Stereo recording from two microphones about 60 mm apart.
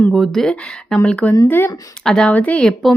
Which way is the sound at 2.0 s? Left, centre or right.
Centre.